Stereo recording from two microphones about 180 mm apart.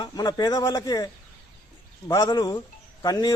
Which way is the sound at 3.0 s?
20° left (ahead or behind).